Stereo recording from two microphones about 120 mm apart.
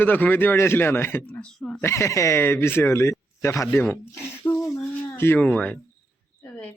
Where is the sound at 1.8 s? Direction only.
20° left (ahead or behind).